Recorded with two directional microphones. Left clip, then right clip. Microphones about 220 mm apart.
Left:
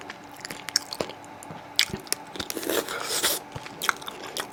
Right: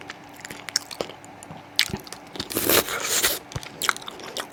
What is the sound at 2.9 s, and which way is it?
Biting, 10° right (ahead or behind).